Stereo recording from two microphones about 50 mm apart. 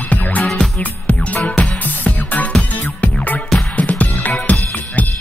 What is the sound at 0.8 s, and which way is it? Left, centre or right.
Music, left.